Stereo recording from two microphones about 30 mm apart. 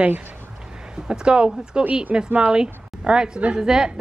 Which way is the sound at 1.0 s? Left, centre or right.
Right.